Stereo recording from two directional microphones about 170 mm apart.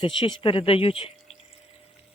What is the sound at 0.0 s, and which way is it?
Speech, 30° left (ahead or behind).